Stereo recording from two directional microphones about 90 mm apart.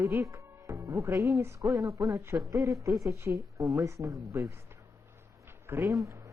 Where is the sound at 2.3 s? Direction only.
50° right (ahead or behind).